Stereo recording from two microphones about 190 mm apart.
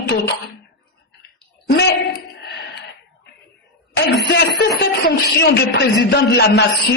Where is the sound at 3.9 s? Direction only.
65° left (ahead or behind).